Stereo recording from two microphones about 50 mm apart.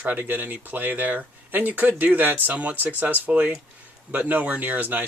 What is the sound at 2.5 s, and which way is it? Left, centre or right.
Speech, right.